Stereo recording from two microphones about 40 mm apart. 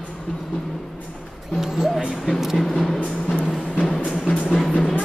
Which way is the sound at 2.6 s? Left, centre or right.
Centre.